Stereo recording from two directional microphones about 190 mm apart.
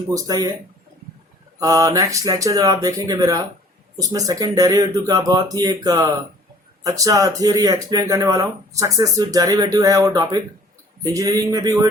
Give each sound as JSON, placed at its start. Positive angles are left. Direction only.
{"t": 0.1, "sound": "speech", "side_deg": -15}
{"t": 1.5, "sound": "speech", "side_deg": -20}